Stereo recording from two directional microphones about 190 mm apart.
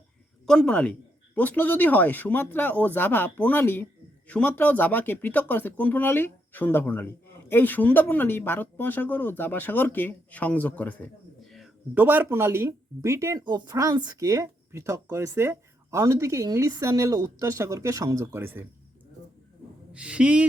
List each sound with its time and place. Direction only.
0.4 s speech: 5° left (ahead or behind)
11.5 s speech: 5° right (ahead or behind)
19.9 s speech: 5° right (ahead or behind)